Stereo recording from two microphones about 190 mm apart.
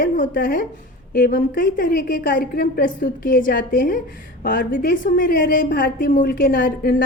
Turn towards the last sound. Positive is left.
turn(degrees=50)  # may be behind; listen again after turning